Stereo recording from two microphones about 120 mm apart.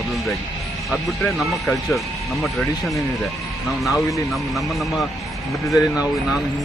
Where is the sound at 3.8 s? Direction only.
Centre (ahead or behind).